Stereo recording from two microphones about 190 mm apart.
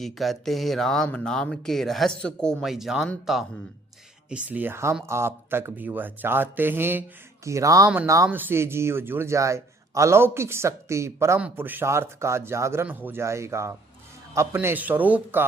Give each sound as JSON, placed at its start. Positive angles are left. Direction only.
{"t": 0.0, "sound": "speech", "side_deg": 0}